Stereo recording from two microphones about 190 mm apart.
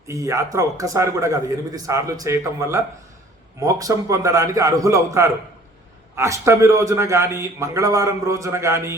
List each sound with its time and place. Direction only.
0.1 s a man's voice: 15° right (ahead or behind)